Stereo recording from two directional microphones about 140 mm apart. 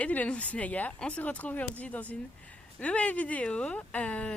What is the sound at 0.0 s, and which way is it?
Speech, 10° left (ahead or behind).